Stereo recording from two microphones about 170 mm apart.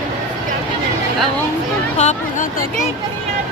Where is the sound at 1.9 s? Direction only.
40° left (ahead or behind).